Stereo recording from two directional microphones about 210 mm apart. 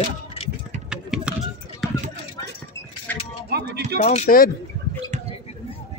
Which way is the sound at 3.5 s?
50° right (ahead or behind).